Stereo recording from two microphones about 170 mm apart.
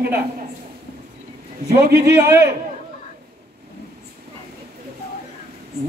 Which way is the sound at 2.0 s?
15° right (ahead or behind).